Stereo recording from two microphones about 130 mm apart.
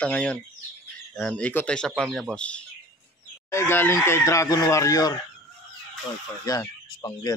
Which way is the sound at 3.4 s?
20° left (ahead or behind).